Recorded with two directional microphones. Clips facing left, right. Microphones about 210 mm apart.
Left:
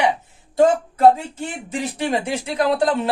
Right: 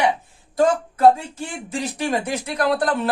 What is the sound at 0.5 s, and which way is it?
Speech, 25° left (ahead or behind).